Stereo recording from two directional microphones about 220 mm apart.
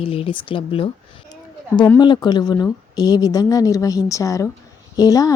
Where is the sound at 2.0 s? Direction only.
20° left (ahead or behind).